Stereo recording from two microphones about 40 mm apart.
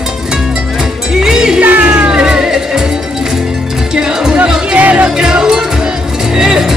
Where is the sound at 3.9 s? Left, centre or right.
Centre.